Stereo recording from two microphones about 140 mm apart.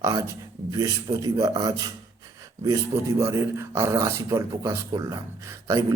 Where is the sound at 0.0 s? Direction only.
20° right (ahead or behind).